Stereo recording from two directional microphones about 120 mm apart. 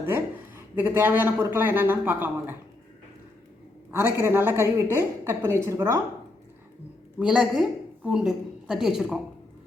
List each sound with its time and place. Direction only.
0.1 s speech: 15° right (ahead or behind)
3.9 s a woman's voice: 20° right (ahead or behind)
7.2 s a woman's voice: 5° right (ahead or behind)